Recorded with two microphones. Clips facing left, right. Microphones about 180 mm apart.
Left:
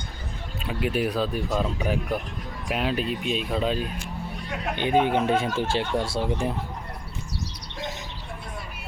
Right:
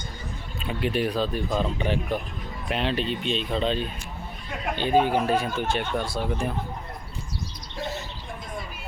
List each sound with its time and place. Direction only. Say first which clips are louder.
0.6 s speech: even; 5° left (ahead or behind)
4.7 s speech: even; 15° left (ahead or behind)